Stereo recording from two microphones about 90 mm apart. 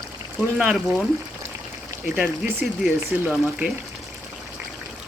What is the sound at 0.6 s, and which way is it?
Speech, 10° right (ahead or behind).